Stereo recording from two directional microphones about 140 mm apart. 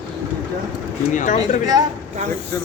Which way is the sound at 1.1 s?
65° left (ahead or behind).